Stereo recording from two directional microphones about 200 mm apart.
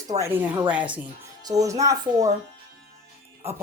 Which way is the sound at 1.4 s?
15° right (ahead or behind).